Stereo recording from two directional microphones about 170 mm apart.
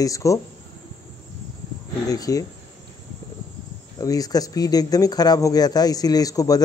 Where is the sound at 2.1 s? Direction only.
20° left (ahead or behind).